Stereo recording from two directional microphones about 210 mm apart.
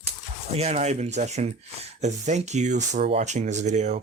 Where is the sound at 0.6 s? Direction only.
30° right (ahead or behind).